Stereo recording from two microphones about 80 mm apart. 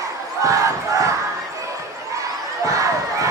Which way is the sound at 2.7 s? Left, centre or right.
Right.